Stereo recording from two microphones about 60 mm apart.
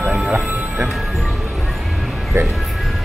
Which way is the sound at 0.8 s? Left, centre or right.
Centre.